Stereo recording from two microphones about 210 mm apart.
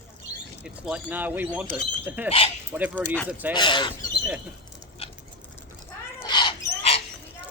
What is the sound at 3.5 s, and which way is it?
Speech, 20° left (ahead or behind).